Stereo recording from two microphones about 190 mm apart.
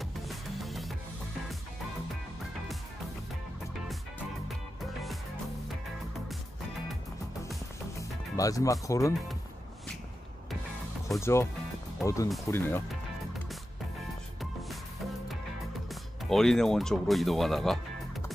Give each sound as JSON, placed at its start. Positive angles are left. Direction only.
{"t": 0.0, "sound": "music", "side_deg": 0}
{"t": 8.0, "sound": "speech", "side_deg": 15}
{"t": 11.1, "sound": "speech", "side_deg": 15}
{"t": 15.9, "sound": "speech", "side_deg": 0}